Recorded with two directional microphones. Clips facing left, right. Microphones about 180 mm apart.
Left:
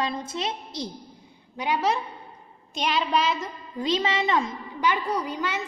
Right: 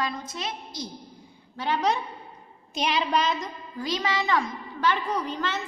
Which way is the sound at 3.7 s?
25° left (ahead or behind).